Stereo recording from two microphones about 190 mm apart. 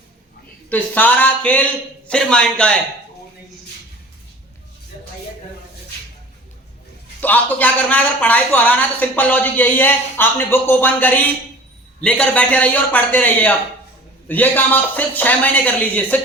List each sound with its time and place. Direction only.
0.7 s a man's voice: 10° left (ahead or behind)
7.2 s a man's voice: 10° left (ahead or behind)